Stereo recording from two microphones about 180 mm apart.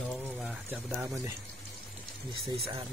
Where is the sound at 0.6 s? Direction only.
10° right (ahead or behind).